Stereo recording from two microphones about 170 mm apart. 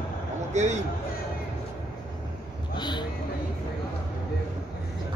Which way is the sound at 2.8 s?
25° left (ahead or behind).